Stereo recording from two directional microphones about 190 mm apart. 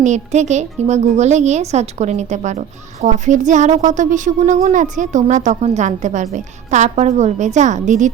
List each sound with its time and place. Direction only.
0.0 s speech: 35° right (ahead or behind)